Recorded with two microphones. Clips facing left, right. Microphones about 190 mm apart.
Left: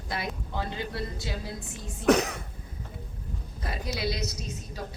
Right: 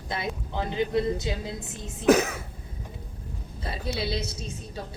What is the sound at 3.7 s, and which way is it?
A woman's voice, 30° right (ahead or behind).